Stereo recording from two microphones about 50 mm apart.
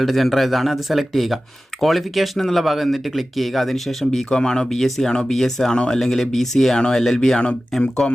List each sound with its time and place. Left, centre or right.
0.0 s speech: centre
6.7 s speech: centre
7.0 s speech: centre
7.3 s speech: centre